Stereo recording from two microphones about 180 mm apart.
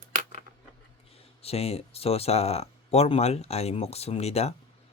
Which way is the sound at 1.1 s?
35° left (ahead or behind).